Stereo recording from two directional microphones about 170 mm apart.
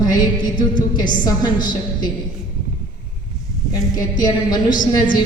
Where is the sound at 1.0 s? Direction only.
25° left (ahead or behind).